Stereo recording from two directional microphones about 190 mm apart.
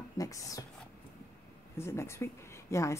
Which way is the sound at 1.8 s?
15° left (ahead or behind).